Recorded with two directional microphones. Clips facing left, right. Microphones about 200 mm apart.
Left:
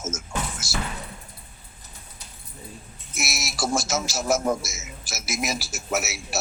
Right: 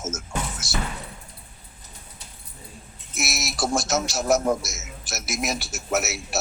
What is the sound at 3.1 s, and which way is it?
A man's voice, centre (ahead or behind).